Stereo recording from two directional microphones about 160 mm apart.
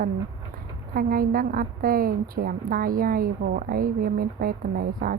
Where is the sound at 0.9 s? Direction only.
65° right (ahead or behind).